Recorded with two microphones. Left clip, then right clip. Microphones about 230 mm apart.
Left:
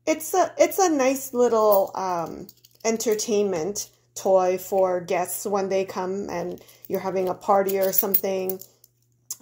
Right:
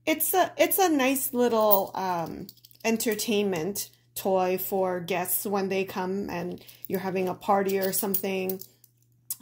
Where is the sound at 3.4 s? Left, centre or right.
Right.